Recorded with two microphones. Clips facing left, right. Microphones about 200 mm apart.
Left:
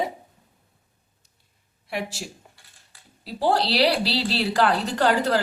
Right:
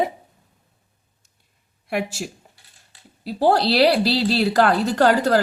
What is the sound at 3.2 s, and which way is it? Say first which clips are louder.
A woman's voice: right 4 dB; 45° right (ahead or behind).